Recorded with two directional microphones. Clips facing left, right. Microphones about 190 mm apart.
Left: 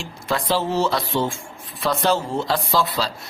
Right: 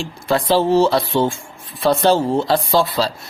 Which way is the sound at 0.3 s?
30° right (ahead or behind).